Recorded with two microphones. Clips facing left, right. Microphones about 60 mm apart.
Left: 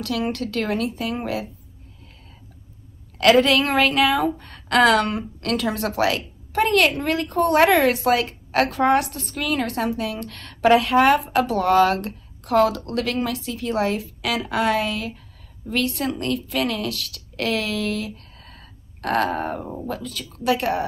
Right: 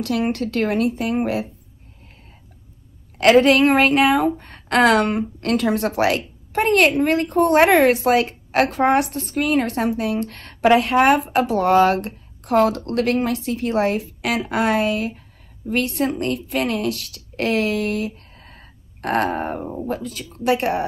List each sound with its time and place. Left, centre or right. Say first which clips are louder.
0.0 s a woman's voice: right 3 dB; right
3.2 s a woman's voice: right 3 dB; right